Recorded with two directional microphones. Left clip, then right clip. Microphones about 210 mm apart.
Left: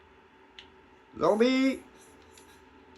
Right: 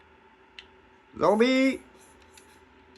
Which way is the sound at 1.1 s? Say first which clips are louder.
Right 3 dB; 45° right (ahead or behind).